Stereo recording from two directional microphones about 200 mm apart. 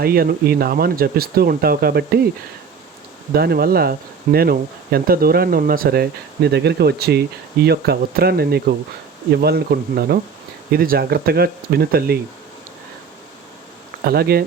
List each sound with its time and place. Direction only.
0.0 s speech: 50° right (ahead or behind)
3.3 s speech: 50° right (ahead or behind)
14.0 s speech: 50° right (ahead or behind)